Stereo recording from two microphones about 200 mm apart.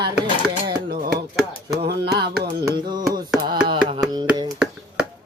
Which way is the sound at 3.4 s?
25° right (ahead or behind).